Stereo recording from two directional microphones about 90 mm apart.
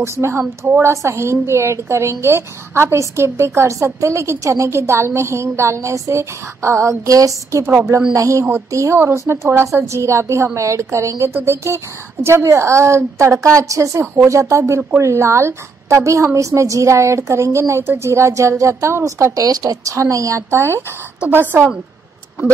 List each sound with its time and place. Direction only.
0.0 s a woman's voice: 30° right (ahead or behind)